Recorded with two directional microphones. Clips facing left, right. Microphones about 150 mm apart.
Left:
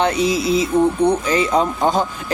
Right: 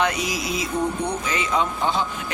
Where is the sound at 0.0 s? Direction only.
30° left (ahead or behind).